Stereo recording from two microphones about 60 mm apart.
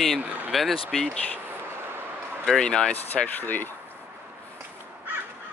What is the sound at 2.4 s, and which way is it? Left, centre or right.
Speech, centre.